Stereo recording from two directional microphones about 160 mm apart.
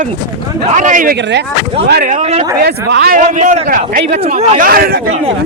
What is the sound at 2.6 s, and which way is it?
Speech, 80° right.